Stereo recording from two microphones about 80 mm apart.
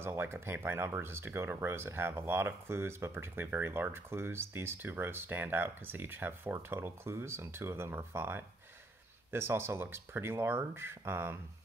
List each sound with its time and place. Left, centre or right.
0.0 s speech: right